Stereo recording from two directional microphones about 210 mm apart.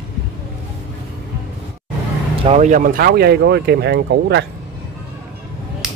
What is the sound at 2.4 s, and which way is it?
Speech, 35° right (ahead or behind).